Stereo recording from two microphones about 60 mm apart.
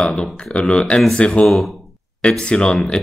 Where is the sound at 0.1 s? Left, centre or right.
Centre.